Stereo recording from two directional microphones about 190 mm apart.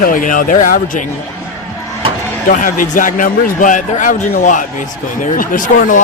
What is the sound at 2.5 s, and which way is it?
Speech, 45° left (ahead or behind).